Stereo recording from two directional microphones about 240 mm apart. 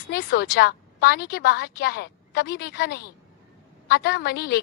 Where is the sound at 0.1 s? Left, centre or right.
Left.